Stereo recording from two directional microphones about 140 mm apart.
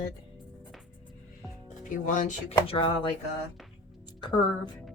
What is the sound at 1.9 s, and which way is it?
Speech, 70° left (ahead or behind).